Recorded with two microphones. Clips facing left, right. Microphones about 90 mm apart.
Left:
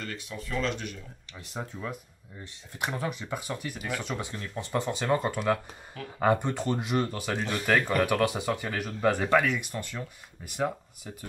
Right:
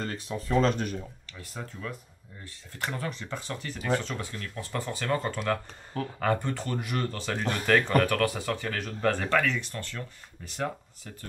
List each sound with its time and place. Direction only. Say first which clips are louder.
0.0 s speech: right 4 dB; 35° right (ahead or behind)
1.3 s speech: left 4 dB; 20° left (ahead or behind)